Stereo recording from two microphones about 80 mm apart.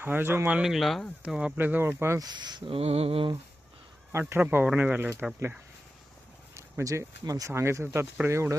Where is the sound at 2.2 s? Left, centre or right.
Right.